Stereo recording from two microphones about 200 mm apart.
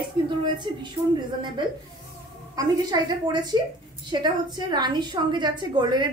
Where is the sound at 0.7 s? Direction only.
25° right (ahead or behind).